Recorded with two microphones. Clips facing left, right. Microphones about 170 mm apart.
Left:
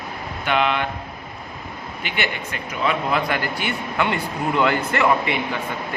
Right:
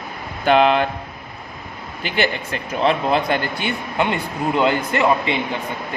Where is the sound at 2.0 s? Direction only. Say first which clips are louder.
Right 6 dB; 35° right (ahead or behind); by 5.6 s 20° right (ahead or behind).